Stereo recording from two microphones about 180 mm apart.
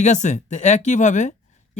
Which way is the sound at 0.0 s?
40° left (ahead or behind).